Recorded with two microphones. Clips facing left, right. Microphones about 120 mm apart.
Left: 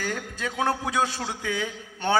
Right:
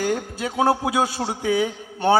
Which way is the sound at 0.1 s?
30° right (ahead or behind).